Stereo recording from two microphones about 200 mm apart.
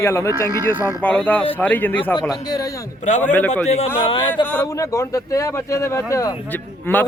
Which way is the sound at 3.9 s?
25° left (ahead or behind).